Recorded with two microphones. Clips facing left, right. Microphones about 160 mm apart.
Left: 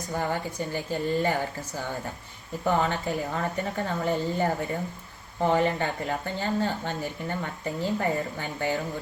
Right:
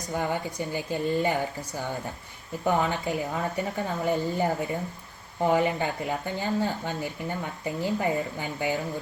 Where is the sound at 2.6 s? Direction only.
Centre (ahead or behind).